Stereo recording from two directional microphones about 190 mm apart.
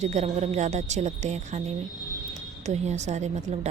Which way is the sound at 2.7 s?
35° right (ahead or behind).